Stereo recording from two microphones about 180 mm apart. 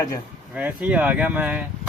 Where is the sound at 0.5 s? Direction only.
5° right (ahead or behind).